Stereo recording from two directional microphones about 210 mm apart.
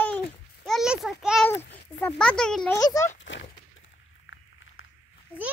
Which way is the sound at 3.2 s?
60° left (ahead or behind).